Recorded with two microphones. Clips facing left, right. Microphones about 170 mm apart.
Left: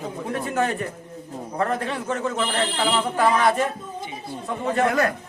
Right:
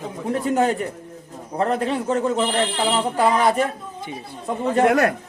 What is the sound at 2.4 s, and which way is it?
A man's voice, 25° right (ahead or behind).